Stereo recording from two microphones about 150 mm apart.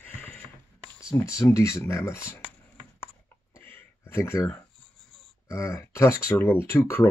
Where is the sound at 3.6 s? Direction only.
15° left (ahead or behind).